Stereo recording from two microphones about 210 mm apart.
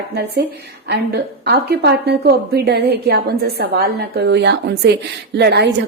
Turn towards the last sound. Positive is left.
turn(degrees=-55)  # may be behind; listen again after turning